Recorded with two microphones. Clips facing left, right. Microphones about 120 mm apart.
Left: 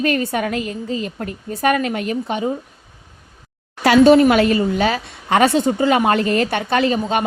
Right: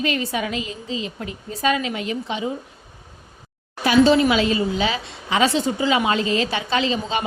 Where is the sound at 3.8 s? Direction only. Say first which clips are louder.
Left 5 dB; 60° left (ahead or behind).